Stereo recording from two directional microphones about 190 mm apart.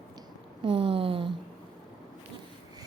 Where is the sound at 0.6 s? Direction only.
25° right (ahead or behind).